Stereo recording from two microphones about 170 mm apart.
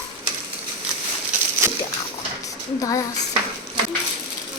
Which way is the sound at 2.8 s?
20° left (ahead or behind).